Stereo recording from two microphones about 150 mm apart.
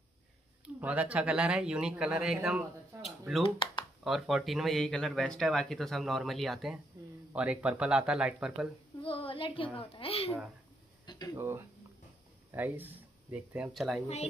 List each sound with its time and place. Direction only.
0.7 s speech: 10° right (ahead or behind)
3.4 s speech: 35° left (ahead or behind)
4.0 s speech: centre (ahead or behind)
9.0 s a child's voice: 35° left (ahead or behind)
11.1 s a sound: 30° left (ahead or behind)
11.3 s speech: 15° right (ahead or behind)